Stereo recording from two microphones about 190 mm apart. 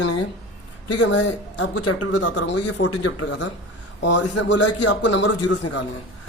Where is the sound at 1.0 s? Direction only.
80° left.